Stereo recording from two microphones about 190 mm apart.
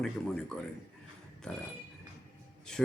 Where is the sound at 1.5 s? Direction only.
5° left (ahead or behind).